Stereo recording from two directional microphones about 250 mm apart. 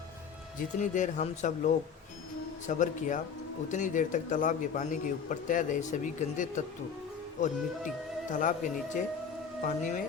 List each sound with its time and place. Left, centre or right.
0.8 s speech: left
8.3 s speech: left